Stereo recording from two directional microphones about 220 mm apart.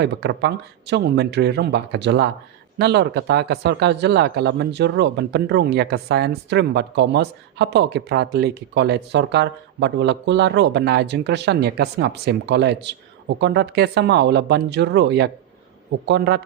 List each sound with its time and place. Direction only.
0.0 s speech: 50° right (ahead or behind)